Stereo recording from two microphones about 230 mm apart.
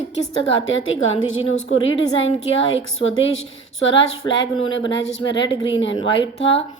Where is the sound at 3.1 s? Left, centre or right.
Left.